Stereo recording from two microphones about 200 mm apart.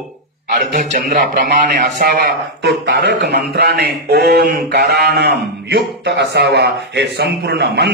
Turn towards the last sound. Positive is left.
turn(degrees=-55)  # may be behind; listen again after turning